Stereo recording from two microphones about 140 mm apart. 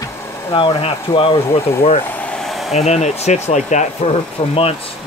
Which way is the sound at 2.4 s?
Centre (ahead or behind).